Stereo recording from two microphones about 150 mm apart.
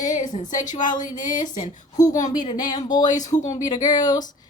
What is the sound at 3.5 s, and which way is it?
Speech, 25° left (ahead or behind).